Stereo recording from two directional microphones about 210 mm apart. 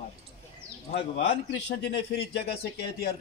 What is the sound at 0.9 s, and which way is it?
Speech, 55° left (ahead or behind).